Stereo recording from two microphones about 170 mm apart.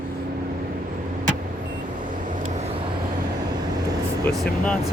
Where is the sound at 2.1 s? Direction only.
50° right (ahead or behind).